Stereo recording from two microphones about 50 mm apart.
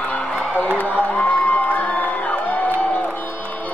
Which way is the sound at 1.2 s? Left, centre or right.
Left.